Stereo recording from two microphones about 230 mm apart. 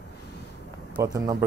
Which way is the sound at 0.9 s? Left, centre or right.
Centre.